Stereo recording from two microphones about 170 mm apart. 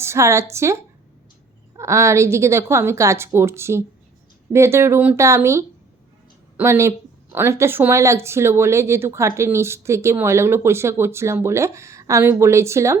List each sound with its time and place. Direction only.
0.0 s speech: 15° right (ahead or behind)